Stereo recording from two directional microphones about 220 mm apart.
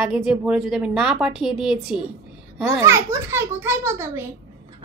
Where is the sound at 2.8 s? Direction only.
10° right (ahead or behind).